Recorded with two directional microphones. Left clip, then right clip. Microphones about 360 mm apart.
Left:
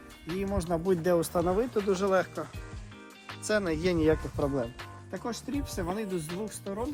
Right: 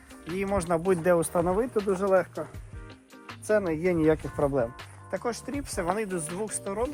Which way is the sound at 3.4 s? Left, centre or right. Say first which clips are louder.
Right 3 dB; centre.